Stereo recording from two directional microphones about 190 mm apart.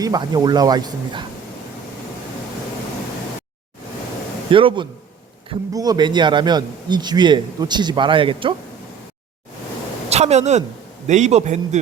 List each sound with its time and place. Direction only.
0.0 s a man's voice: 20° right (ahead or behind)
4.5 s a man's voice: 25° right (ahead or behind)
10.1 s a man's voice: 35° right (ahead or behind)